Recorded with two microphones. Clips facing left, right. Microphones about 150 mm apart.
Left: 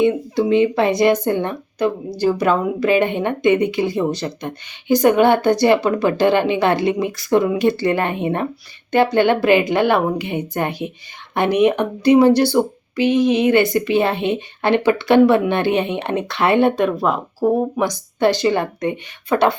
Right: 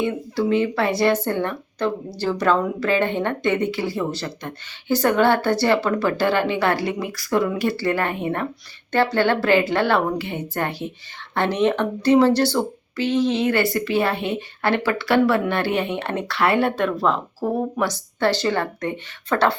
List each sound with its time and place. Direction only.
0.0 s speech: 20° left (ahead or behind)